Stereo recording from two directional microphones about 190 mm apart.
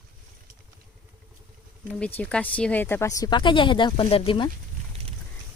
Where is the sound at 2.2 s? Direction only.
5° left (ahead or behind); by 4.5 s 25° left (ahead or behind).